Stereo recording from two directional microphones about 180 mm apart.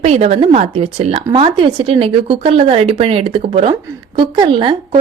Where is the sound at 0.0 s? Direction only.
35° right (ahead or behind).